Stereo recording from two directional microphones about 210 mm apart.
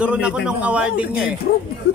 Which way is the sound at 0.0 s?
5° right (ahead or behind).